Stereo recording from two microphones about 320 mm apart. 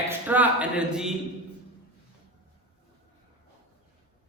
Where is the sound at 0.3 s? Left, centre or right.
Centre.